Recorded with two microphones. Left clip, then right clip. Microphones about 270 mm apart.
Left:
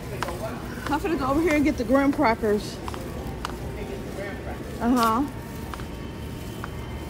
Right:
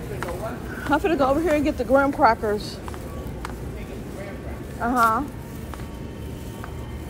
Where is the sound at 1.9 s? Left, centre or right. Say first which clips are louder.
Right 5 dB; left.